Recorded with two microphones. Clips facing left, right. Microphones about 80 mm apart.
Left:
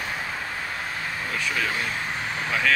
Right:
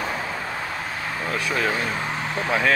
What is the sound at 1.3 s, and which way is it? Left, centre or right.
Speech, right.